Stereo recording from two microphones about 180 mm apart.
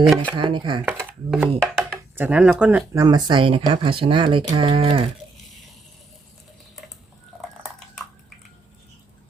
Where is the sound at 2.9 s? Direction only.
20° right (ahead or behind).